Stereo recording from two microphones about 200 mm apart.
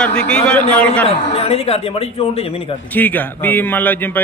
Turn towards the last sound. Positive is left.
turn(degrees=10)  # may be behind; listen again after turning